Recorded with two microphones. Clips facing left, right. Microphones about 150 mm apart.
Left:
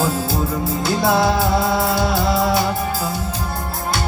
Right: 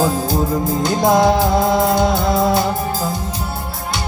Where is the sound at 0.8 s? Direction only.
20° right (ahead or behind).